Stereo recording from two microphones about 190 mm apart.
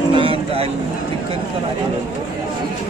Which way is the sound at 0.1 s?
25° right (ahead or behind).